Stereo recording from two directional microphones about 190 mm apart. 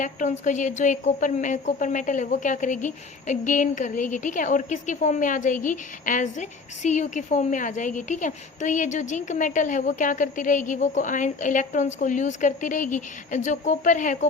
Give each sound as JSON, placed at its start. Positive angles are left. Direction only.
{"t": 0.0, "sound": "a woman's voice", "side_deg": 40}